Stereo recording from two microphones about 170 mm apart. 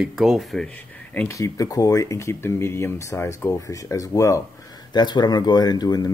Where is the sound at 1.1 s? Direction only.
15° left (ahead or behind).